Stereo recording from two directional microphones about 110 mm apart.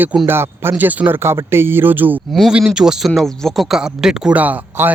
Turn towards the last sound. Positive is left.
turn(degrees=-15)  # may be behind; listen again after turning